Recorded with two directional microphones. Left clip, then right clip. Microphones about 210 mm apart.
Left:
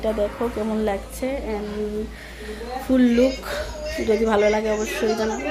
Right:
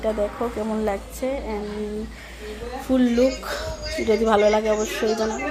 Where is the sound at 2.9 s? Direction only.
Centre (ahead or behind).